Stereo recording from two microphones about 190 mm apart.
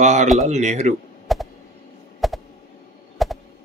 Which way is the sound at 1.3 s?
Centre (ahead or behind).